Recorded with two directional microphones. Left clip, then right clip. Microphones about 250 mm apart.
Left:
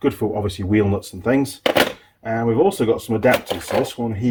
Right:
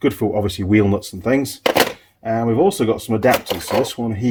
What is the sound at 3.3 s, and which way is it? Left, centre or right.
Speech, centre.